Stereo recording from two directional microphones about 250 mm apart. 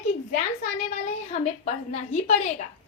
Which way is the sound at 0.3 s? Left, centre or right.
Left.